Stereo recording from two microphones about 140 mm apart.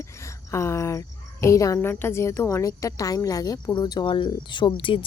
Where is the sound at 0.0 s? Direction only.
20° left (ahead or behind).